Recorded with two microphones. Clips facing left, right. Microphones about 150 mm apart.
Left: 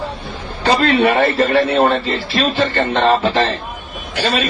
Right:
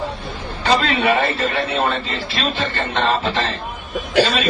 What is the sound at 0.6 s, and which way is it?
A man's voice, 40° left (ahead or behind).